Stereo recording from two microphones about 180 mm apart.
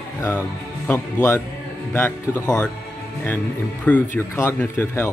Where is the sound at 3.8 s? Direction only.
10° left (ahead or behind).